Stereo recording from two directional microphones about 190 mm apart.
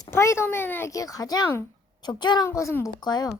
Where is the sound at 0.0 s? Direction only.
15° left (ahead or behind).